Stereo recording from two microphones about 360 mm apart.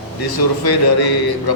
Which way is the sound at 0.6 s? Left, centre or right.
Left.